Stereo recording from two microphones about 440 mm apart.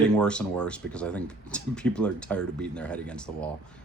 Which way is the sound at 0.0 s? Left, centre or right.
Centre.